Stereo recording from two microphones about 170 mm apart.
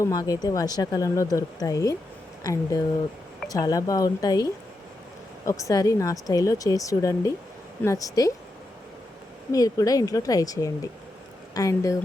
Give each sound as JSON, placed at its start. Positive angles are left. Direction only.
{"t": 0.0, "sound": "speech", "side_deg": 20}
{"t": 5.5, "sound": "speech", "side_deg": 20}
{"t": 9.5, "sound": "speech", "side_deg": 20}